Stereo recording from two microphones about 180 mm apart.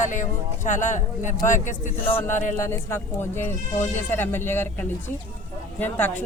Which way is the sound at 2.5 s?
15° left (ahead or behind).